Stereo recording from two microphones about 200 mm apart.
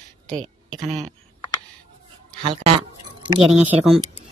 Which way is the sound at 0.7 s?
25° right (ahead or behind).